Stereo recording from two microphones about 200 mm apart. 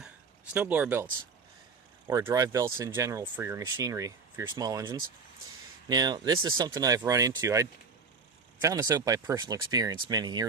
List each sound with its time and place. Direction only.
0.5 s speech: 10° right (ahead or behind)
2.0 s speech: 15° right (ahead or behind)